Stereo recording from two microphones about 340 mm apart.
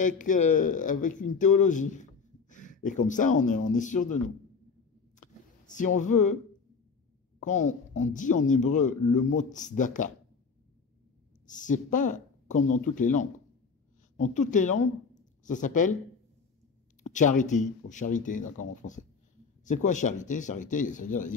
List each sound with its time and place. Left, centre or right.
0.0 s speech: left
5.7 s speech: left
7.4 s speech: left
11.4 s speech: left
15.1 s a sound: left
17.0 s speech: left